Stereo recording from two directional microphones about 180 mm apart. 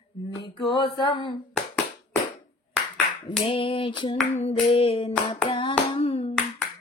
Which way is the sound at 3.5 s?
30° left (ahead or behind).